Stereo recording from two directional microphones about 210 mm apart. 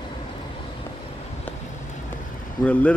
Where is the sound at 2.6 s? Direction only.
5° left (ahead or behind).